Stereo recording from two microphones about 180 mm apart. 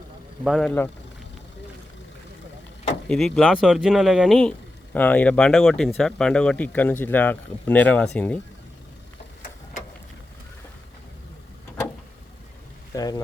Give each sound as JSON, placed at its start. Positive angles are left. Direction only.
{"t": 0.4, "sound": "speech", "side_deg": 0}
{"t": 3.1, "sound": "speech", "side_deg": 5}
{"t": 12.9, "sound": "boat", "side_deg": 20}